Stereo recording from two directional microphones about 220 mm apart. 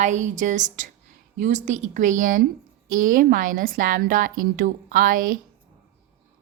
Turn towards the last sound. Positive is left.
turn(degrees=-40)  # may be behind; listen again after turning